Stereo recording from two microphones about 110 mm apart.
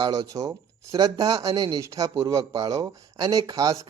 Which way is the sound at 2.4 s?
40° right (ahead or behind).